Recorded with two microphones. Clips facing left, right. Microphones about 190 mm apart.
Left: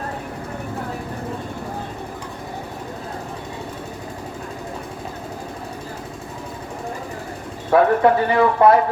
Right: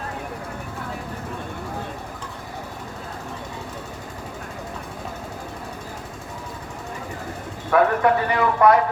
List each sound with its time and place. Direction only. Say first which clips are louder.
7.7 s speech: left 3 dB; 30° left (ahead or behind)